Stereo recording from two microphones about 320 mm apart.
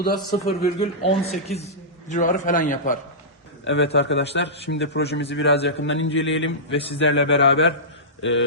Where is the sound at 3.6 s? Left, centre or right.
Left.